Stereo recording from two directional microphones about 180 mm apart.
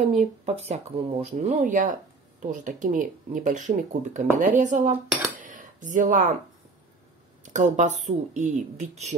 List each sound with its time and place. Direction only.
0.0 s speech: 40° right (ahead or behind)
5.4 s a sound: 45° right (ahead or behind)
7.4 s speech: 45° right (ahead or behind)